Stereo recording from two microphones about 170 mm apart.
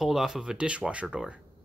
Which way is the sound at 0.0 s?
Centre (ahead or behind).